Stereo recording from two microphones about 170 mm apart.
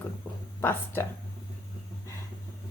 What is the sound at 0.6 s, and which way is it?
Speech, 10° left (ahead or behind).